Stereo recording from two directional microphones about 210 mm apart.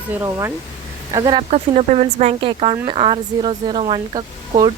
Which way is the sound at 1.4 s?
30° right (ahead or behind).